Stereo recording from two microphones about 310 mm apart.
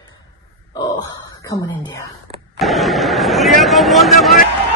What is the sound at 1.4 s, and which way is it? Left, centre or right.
Speech, centre.